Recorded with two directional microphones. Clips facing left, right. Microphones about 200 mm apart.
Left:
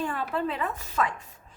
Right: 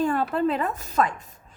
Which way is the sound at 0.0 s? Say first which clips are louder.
Right 6 dB; 40° right (ahead or behind).